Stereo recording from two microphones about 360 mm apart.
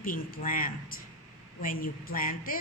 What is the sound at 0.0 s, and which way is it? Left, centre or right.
A woman's voice, left.